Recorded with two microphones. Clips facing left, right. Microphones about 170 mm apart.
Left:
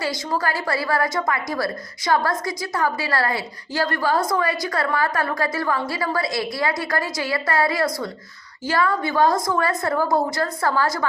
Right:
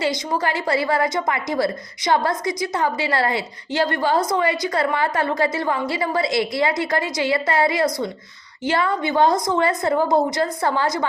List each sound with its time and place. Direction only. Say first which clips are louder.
0.0 s a woman's voice: right 2 dB; 20° right (ahead or behind)